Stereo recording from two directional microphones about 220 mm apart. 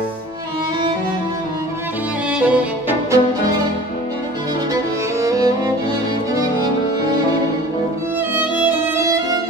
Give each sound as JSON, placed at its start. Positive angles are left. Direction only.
{"t": 2.3, "sound": "music", "side_deg": -5}
{"t": 5.2, "sound": "music", "side_deg": -15}
{"t": 8.4, "sound": "violin", "side_deg": -5}